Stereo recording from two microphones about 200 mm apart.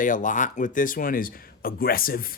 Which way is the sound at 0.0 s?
40° left (ahead or behind).